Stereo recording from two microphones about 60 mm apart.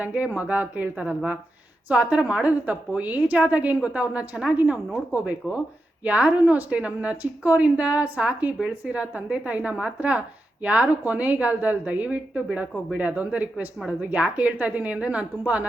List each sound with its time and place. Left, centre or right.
0.0 s a woman's voice: right